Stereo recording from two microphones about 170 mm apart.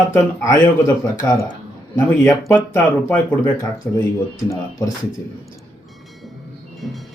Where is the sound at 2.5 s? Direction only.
15° left (ahead or behind).